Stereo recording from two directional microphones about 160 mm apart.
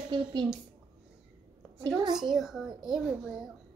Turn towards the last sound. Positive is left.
turn(degrees=-5)  # may be behind; listen again after turning